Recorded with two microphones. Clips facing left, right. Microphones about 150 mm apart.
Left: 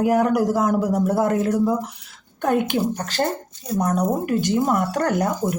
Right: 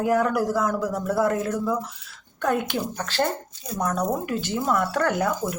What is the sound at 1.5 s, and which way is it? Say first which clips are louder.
Speech: left 5 dB; 35° left (ahead or behind).